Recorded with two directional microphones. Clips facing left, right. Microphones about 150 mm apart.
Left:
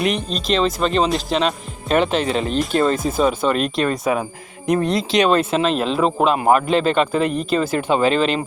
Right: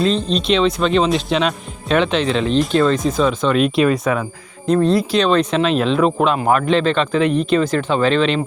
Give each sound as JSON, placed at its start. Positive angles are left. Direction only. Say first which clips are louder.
{"t": 0.0, "sound": "speech", "louder": "right 3 dB", "side_deg": 15}
{"t": 0.3, "sound": "speech", "louder": "right 3 dB", "side_deg": 0}
{"t": 4.0, "sound": "speech", "louder": "right 1 dB", "side_deg": 25}
{"t": 4.6, "sound": "speech", "louder": "right 4 dB", "side_deg": 15}